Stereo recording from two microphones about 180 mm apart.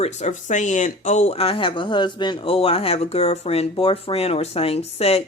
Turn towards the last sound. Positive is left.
turn(degrees=35)  # may be behind; listen again after turning